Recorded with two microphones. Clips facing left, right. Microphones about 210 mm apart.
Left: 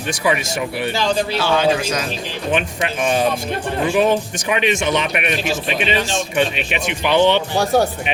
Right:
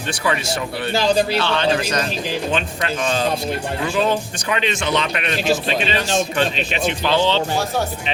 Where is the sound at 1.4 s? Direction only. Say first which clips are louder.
Left 2 dB; 5° left (ahead or behind).